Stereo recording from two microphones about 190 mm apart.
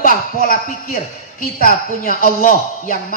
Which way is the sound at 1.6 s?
45° left (ahead or behind).